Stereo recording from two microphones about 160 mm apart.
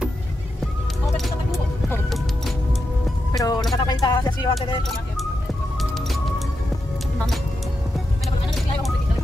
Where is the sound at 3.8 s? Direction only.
30° left (ahead or behind).